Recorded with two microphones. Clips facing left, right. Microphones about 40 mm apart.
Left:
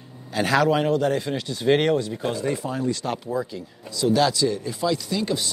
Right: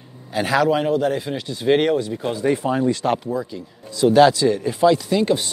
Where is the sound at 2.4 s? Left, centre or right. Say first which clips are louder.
Right 10 dB; right.